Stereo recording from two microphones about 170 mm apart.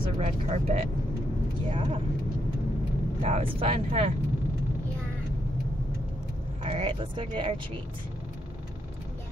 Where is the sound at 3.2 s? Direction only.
35° right (ahead or behind).